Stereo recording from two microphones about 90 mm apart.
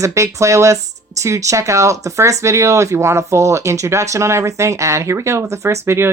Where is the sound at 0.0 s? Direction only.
35° right (ahead or behind).